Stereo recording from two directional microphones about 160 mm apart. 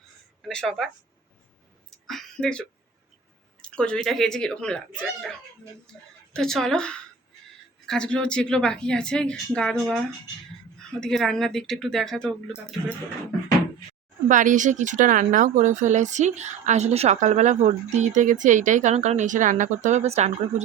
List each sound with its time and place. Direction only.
0.4 s a woman's voice: 5° left (ahead or behind)
2.0 s a sound: 5° left (ahead or behind)
3.6 s a woman's voice: 5° left (ahead or behind)
10.8 s a woman's voice: 5° left (ahead or behind)
14.3 s speech: 55° right (ahead or behind)